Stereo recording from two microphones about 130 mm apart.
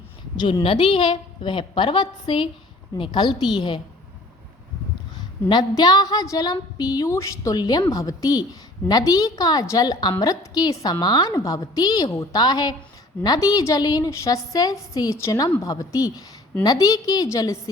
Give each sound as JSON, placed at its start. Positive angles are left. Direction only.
{"t": 0.3, "sound": "a woman's voice", "side_deg": 40}
{"t": 5.1, "sound": "a woman's voice", "side_deg": 35}